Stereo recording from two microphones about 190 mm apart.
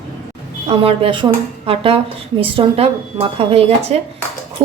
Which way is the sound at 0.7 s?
30° right (ahead or behind).